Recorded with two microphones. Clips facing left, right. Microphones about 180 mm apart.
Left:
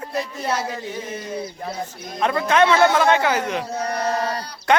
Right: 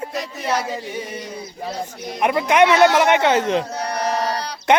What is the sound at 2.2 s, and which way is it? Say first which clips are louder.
Speech: right 2 dB; 15° right (ahead or behind).